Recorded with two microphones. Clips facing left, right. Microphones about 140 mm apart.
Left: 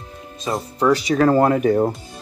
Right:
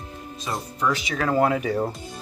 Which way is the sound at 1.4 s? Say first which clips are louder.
Left 6 dB; 50° left (ahead or behind).